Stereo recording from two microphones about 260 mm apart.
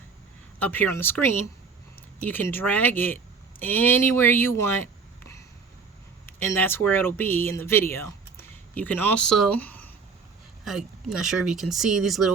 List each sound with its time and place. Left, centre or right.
0.6 s speech: centre
6.2 s speech: centre